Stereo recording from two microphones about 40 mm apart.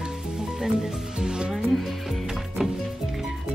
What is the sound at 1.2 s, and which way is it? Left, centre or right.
Music, centre.